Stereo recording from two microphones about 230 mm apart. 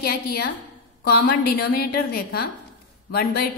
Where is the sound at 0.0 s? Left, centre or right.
Left.